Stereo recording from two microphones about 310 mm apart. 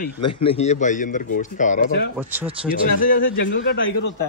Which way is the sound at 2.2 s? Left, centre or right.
Centre.